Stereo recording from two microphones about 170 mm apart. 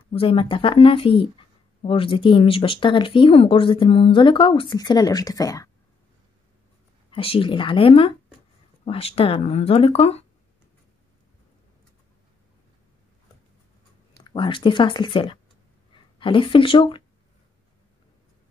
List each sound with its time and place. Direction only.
0.1 s speech: 30° left (ahead or behind)
7.1 s speech: 35° left (ahead or behind)
14.2 s speech: 30° left (ahead or behind)